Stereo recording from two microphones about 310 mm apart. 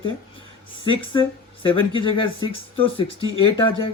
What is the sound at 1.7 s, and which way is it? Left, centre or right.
Speech, centre.